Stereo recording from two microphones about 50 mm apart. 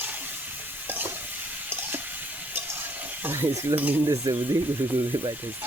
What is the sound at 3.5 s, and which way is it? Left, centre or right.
Stir, right.